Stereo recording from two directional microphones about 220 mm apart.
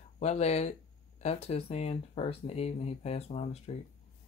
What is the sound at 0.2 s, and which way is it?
Speech, 30° left (ahead or behind).